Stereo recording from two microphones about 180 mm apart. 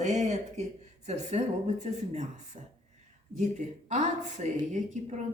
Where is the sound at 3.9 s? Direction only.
40° right (ahead or behind).